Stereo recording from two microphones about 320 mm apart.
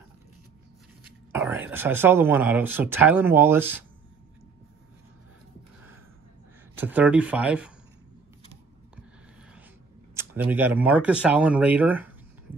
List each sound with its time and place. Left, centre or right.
1.3 s speech: centre
6.7 s speech: centre
10.1 s speech: centre